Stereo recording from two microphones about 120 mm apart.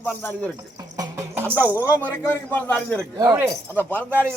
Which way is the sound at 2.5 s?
15° left (ahead or behind).